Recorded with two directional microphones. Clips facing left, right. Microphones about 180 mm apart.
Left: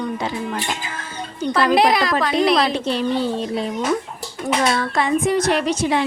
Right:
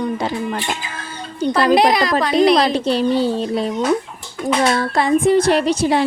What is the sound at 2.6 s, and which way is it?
A woman's voice, 35° right (ahead or behind).